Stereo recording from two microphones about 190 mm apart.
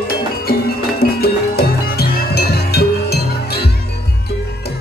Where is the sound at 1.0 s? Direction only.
55° left (ahead or behind).